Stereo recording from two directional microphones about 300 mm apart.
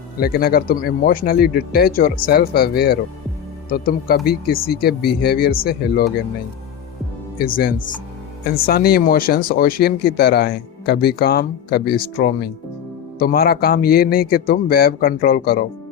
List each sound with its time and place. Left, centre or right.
0.2 s speech: left
7.3 s speech: left